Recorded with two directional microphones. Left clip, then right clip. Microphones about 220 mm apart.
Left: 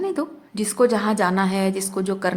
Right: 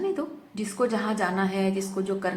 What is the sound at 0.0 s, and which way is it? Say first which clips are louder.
A woman's voice: left 4 dB; 45° left (ahead or behind).